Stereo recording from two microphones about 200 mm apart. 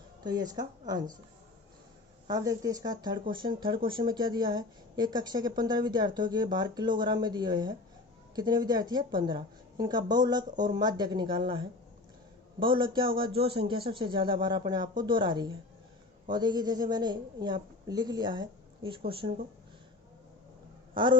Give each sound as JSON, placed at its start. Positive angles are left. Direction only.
{"t": 0.2, "sound": "a woman's voice", "side_deg": -20}
{"t": 2.2, "sound": "a woman's voice", "side_deg": -20}
{"t": 20.9, "sound": "speech", "side_deg": -25}